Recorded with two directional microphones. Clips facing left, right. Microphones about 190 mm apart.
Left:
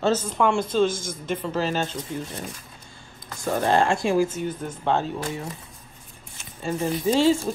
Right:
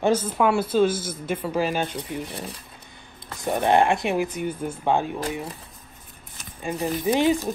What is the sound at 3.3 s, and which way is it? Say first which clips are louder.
Speech: right 1 dB; 20° right (ahead or behind).